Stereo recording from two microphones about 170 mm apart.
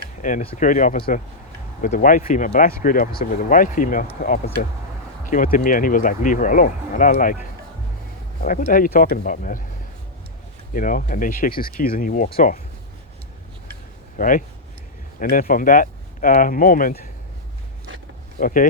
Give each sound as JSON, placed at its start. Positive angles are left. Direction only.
{"t": 0.2, "sound": "speech", "side_deg": 50}
{"t": 5.2, "sound": "speech", "side_deg": 50}
{"t": 8.4, "sound": "speech", "side_deg": 50}
{"t": 10.8, "sound": "speech", "side_deg": 50}
{"t": 14.2, "sound": "speech", "side_deg": 50}
{"t": 18.3, "sound": "speech", "side_deg": 55}